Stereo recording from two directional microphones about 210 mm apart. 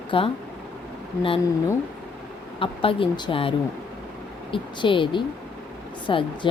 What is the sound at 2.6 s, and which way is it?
Speech, 25° left (ahead or behind).